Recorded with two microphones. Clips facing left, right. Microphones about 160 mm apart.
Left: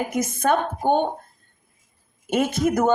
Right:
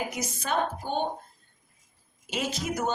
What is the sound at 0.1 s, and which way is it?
Speech, 50° left (ahead or behind).